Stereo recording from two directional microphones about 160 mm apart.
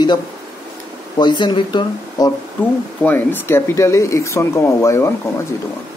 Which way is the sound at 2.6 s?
10° left (ahead or behind).